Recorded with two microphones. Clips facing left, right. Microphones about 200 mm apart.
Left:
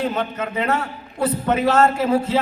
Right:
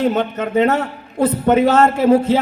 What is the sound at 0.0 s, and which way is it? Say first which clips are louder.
A man's voice: right 6 dB; 40° right (ahead or behind).